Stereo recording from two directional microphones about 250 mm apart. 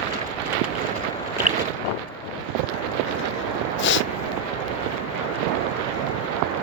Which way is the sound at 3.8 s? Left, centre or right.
Left.